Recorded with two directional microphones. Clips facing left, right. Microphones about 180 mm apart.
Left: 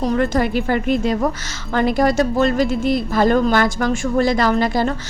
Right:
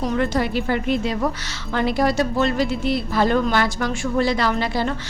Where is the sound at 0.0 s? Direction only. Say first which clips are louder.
Left 3 dB; 50° left (ahead or behind).